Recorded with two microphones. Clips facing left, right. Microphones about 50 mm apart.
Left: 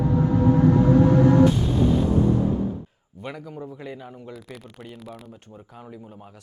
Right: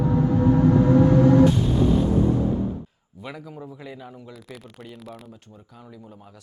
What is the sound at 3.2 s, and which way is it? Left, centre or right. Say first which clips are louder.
A man's voice: left 2 dB; centre.